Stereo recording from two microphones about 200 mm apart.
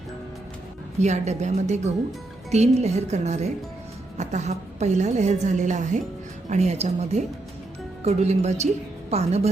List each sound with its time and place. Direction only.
1.0 s a woman's voice: 35° right (ahead or behind)